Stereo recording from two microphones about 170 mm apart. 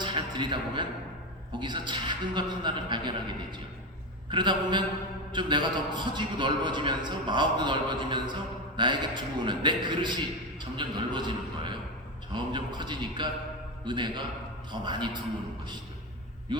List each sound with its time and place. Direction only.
0.0 s music: 30° right (ahead or behind)
1.5 s a man's voice: 25° right (ahead or behind)
4.3 s a man's voice: 25° right (ahead or behind)